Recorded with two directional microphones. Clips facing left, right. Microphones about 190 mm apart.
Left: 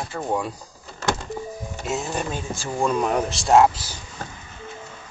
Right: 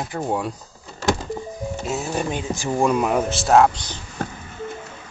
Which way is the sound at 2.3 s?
15° right (ahead or behind).